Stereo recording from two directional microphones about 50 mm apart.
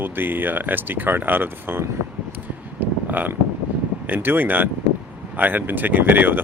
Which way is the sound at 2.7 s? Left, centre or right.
Right.